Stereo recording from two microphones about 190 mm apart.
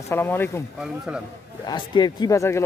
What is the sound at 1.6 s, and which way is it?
Speech, 20° left (ahead or behind).